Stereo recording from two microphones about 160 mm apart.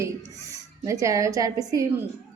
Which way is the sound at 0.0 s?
20° right (ahead or behind).